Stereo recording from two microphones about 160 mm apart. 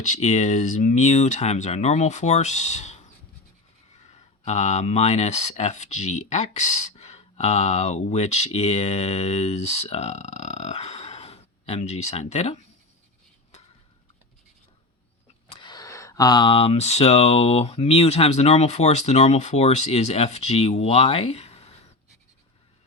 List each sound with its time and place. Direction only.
0.0 s speech: 45° left (ahead or behind)
4.1 s speech: 45° left (ahead or behind)
15.4 s speech: 30° left (ahead or behind)